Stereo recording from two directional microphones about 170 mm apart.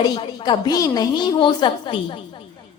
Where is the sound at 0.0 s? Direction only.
25° left (ahead or behind).